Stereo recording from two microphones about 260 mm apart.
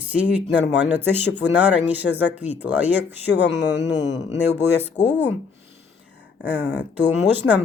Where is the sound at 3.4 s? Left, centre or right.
Left.